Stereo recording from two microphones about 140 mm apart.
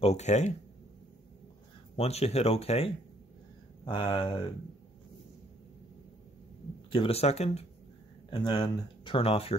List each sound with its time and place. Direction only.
0.0 s speech: 50° left (ahead or behind)
2.0 s speech: 50° left (ahead or behind)
6.9 s speech: 45° left (ahead or behind)
8.3 s speech: 35° left (ahead or behind)